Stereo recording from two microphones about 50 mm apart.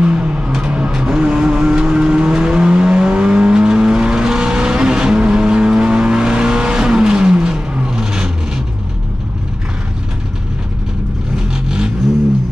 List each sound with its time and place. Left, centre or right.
0.0 s vehicle: right
11.5 s vehicle: centre